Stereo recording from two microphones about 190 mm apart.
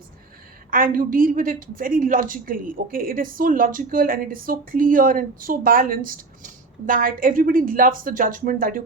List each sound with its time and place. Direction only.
0.7 s a woman's voice: 45° right (ahead or behind)